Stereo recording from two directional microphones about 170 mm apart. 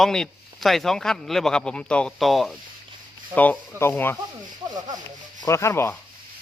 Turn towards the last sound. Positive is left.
turn(degrees=15)  # may be behind; listen again after turning